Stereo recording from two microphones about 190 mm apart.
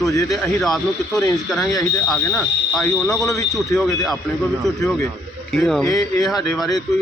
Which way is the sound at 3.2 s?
15° left (ahead or behind).